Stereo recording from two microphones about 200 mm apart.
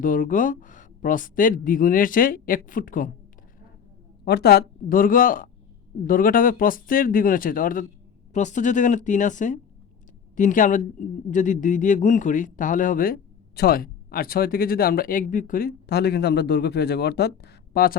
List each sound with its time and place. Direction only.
0.0 s speech: 45° left (ahead or behind)
4.3 s speech: 55° left (ahead or behind)